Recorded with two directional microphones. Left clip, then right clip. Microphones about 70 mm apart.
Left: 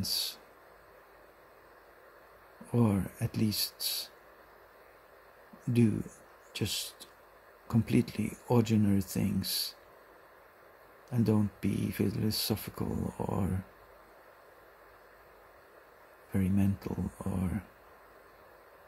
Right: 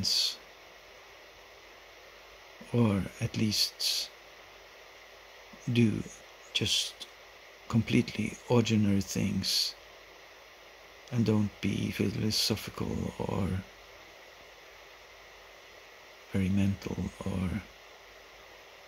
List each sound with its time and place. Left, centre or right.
0.0 s speech: left
2.7 s speech: centre
3.2 s speech: left
5.7 s speech: left
11.1 s speech: left
12.8 s speech: centre
16.4 s speech: centre
16.9 s speech: centre